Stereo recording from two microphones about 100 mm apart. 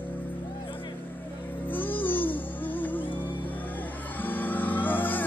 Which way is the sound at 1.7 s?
20° left (ahead or behind).